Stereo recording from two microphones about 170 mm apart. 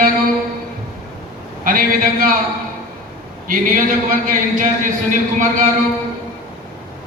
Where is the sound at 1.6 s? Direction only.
55° right (ahead or behind).